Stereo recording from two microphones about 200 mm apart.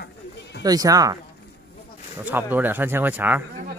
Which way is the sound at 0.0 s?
55° left (ahead or behind).